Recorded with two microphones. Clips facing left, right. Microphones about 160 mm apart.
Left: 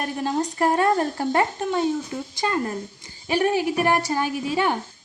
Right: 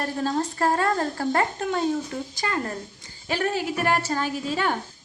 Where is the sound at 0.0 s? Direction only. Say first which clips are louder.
Left 1 dB; 15° left (ahead or behind).